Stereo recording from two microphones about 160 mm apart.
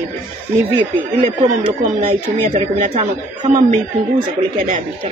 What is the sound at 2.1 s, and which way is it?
Speech, 40° right (ahead or behind).